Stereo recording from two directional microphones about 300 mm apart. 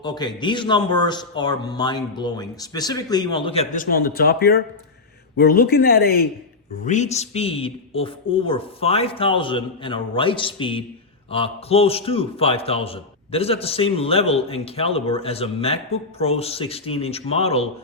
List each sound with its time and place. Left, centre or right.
0.0 s a man's voice: centre